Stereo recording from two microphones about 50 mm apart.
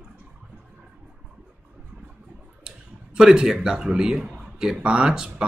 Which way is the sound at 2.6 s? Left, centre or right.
Centre.